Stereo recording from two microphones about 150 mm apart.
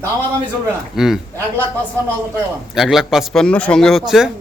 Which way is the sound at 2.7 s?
Centre (ahead or behind).